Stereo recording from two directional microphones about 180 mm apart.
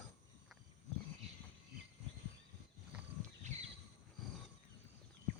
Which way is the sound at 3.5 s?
40° right (ahead or behind).